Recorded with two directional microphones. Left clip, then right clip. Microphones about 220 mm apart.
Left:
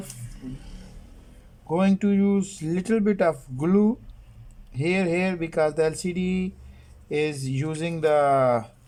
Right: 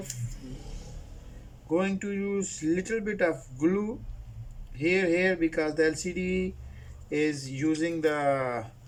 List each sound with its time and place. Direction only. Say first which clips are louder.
1.7 s speech: left 5 dB; 50° left (ahead or behind)